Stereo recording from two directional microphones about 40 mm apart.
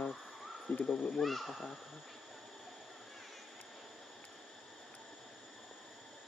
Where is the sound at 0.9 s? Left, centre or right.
Left.